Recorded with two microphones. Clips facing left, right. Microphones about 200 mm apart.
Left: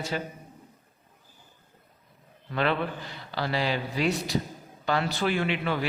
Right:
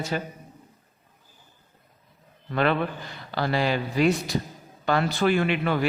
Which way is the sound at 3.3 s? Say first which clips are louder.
Right 4 dB; 50° right (ahead or behind).